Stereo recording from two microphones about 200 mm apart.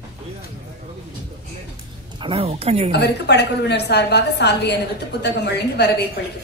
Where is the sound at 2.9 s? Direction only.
55° left (ahead or behind).